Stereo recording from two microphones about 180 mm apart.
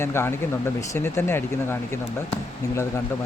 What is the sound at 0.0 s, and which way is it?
Speech, 15° left (ahead or behind).